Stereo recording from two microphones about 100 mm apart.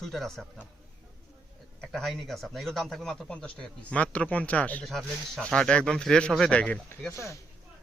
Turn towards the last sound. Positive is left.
turn(degrees=30)  # may be behind; listen again after turning